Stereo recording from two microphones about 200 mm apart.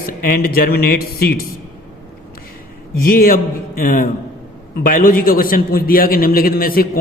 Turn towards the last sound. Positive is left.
turn(degrees=45)  # may be behind; listen again after turning